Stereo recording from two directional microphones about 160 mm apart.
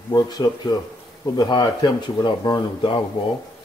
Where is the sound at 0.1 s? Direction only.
25° left (ahead or behind).